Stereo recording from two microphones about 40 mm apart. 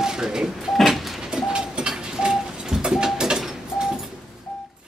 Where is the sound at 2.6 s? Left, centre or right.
Centre.